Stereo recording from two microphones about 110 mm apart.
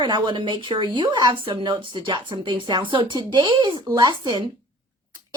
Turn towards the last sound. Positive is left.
turn(degrees=-40)  # may be behind; listen again after turning